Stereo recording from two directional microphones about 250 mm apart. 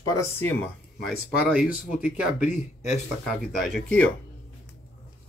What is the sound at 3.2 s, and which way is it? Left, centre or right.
Speech, centre.